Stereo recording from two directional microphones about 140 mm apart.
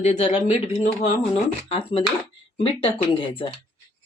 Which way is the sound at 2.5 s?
40° left (ahead or behind).